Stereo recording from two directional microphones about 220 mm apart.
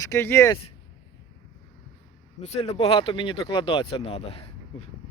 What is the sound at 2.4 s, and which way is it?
Speech, 30° left (ahead or behind).